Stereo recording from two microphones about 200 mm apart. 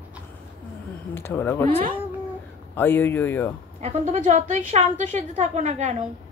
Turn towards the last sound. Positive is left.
turn(degrees=-35)  # may be behind; listen again after turning